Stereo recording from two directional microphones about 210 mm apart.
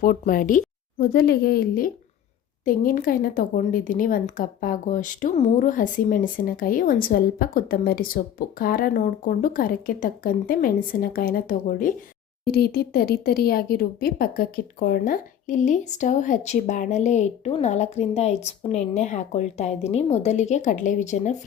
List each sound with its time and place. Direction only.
0.0 s a woman's voice: 40° left (ahead or behind)